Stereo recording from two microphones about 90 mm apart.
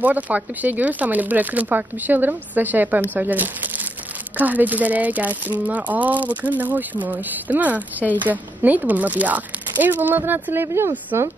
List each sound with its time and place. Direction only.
0.0 s speech: 20° right (ahead or behind)